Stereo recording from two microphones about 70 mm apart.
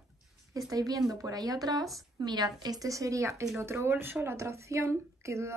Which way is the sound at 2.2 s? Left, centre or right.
Right.